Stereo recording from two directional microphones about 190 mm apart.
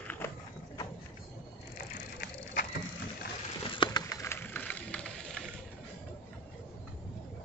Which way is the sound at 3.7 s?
25° left (ahead or behind).